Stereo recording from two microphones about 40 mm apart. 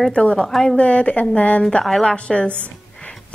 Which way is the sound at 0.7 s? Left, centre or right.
Left.